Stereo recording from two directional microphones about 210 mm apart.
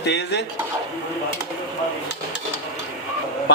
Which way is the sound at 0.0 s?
55° left (ahead or behind).